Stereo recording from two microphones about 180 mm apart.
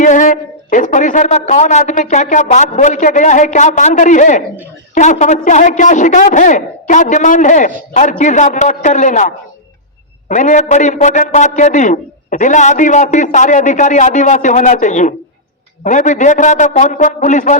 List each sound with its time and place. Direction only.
0.0 s a man's voice: 45° left (ahead or behind)